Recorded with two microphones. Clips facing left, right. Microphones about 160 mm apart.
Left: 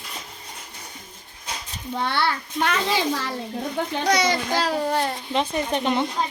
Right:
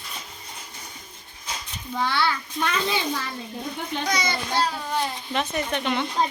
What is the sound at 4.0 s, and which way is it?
Child singing, 75° left (ahead or behind).